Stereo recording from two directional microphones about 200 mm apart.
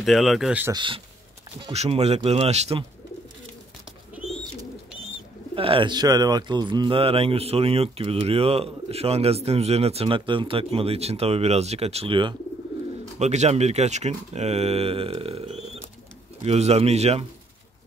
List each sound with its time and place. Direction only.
0.0 s speech: centre (ahead or behind)
0.7 s speech: 25° right (ahead or behind)
5.5 s speech: 25° right (ahead or behind)